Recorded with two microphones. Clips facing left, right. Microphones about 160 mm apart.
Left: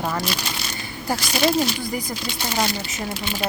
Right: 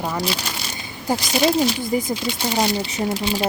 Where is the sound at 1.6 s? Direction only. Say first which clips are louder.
Right 3 dB; 20° right (ahead or behind).